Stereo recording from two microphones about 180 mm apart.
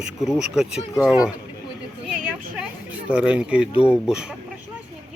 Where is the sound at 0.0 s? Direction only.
Centre (ahead or behind).